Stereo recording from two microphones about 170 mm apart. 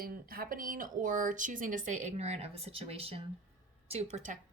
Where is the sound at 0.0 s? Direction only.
60° right (ahead or behind).